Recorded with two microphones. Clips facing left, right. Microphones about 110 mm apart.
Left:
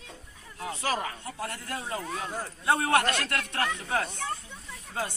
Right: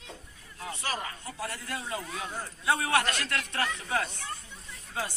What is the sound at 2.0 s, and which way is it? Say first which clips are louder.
Speech: left 3 dB; 50° left (ahead or behind).